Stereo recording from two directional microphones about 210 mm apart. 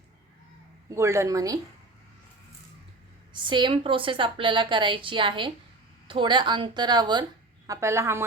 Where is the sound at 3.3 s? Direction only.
20° right (ahead or behind).